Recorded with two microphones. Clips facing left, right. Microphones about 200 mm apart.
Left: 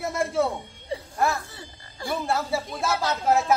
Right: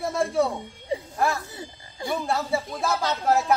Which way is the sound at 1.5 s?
20° right (ahead or behind).